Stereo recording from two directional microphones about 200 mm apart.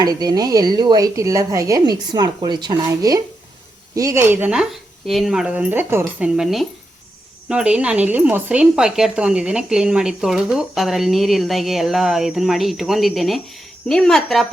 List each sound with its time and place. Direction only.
0.0 s speech: 20° right (ahead or behind); by 14.4 s centre (ahead or behind)